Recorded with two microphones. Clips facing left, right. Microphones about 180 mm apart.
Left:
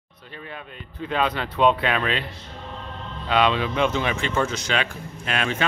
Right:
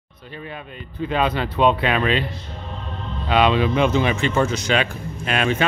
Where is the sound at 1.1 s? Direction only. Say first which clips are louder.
Right 3 dB; 5° right (ahead or behind).